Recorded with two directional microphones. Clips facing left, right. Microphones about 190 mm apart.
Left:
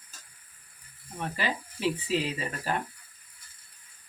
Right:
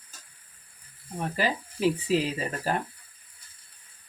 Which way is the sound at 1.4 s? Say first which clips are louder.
Right 6 dB; 40° right (ahead or behind).